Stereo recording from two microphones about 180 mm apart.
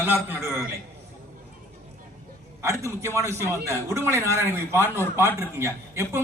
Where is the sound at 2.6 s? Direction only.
15° right (ahead or behind).